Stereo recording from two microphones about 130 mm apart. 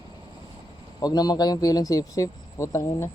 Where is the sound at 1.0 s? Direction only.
30° left (ahead or behind).